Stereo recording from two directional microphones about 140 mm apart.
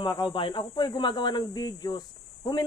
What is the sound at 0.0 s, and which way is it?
Speech, 35° left (ahead or behind).